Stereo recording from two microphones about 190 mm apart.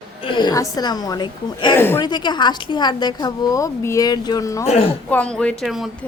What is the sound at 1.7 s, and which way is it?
Speech, 10° left (ahead or behind).